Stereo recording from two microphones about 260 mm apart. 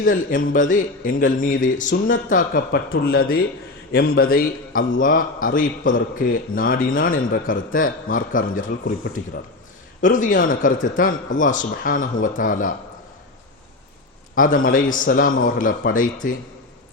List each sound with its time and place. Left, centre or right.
0.0 s speech: left
10.0 s a man's voice: left
14.3 s speech: left